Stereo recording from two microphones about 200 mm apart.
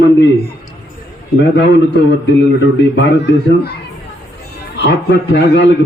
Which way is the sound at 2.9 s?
60° left (ahead or behind).